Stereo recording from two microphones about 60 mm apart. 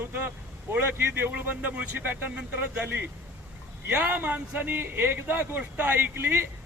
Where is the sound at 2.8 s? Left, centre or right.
Right.